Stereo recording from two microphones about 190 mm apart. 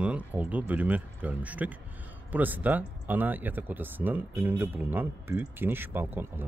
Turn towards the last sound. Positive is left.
turn(degrees=-10)  # may be behind; listen again after turning